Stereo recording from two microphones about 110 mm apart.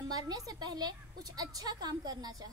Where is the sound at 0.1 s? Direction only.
35° right (ahead or behind).